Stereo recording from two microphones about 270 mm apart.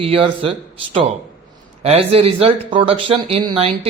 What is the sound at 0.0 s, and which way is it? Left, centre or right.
Speech, centre.